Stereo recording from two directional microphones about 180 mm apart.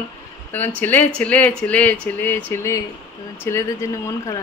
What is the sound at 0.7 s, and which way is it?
A woman's voice, 10° left (ahead or behind).